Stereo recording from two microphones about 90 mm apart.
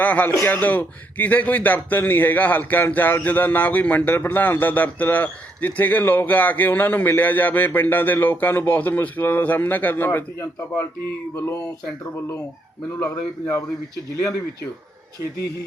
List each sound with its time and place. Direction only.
0.0 s a man's voice: 20° left (ahead or behind)
11.3 s a man's voice: 30° left (ahead or behind)
13.0 s a man's voice: 35° left (ahead or behind)